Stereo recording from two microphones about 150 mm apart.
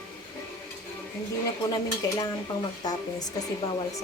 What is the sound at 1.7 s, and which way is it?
Speech, 25° left (ahead or behind).